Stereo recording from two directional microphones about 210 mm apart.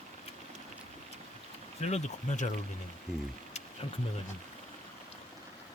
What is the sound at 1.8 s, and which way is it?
Speech, 30° left (ahead or behind).